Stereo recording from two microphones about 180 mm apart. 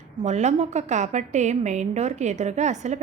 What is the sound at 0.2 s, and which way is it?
A woman's voice, 40° right (ahead or behind).